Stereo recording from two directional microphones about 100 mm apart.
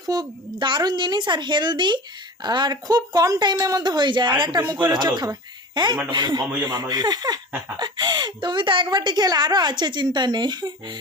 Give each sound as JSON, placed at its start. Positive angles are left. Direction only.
{"t": 0.0, "sound": "a woman's voice", "side_deg": -40}
{"t": 4.6, "sound": "a woman's voice", "side_deg": -40}